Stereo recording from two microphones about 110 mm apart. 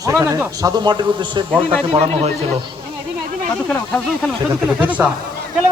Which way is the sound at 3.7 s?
10° left (ahead or behind).